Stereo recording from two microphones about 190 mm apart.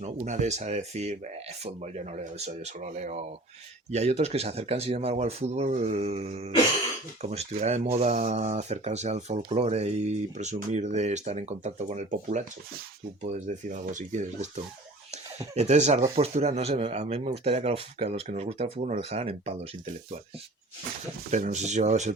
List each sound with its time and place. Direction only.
0.0 s speech: 40° right (ahead or behind)
21.2 s speech: 40° right (ahead or behind)